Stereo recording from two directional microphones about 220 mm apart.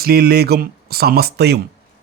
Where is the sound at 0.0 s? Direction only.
45° right (ahead or behind).